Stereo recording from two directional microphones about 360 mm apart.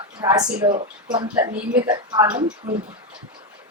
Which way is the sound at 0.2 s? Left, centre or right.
Centre.